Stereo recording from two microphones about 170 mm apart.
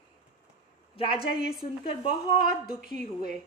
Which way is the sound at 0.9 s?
30° left (ahead or behind).